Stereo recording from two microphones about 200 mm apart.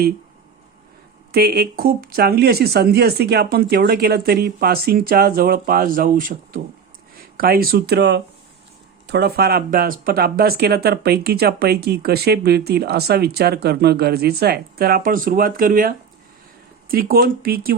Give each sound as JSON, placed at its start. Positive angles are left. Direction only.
{"t": 1.3, "sound": "speech", "side_deg": -50}